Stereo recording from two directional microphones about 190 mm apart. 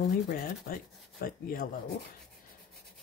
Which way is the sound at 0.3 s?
50° left (ahead or behind).